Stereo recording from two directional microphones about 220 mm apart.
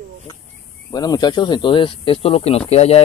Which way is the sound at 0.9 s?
15° left (ahead or behind).